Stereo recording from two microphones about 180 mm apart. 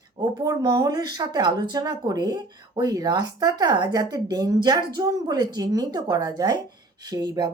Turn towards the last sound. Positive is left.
turn(degrees=-20)  # may be behind; listen again after turning